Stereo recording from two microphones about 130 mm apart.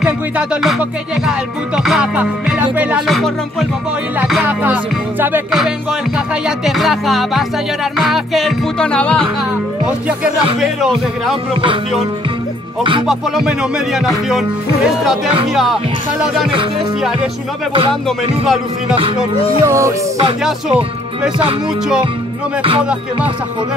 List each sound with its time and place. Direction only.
0.0 s music: 5° right (ahead or behind)
6.1 s music: centre (ahead or behind)
9.8 s music: 10° right (ahead or behind)
13.0 s music: 5° right (ahead or behind)
15.5 s music: centre (ahead or behind)
19.6 s music: 25° right (ahead or behind)
22.6 s music: 45° right (ahead or behind)